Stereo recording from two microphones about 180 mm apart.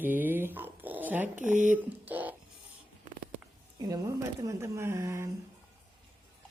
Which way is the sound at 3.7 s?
20° right (ahead or behind).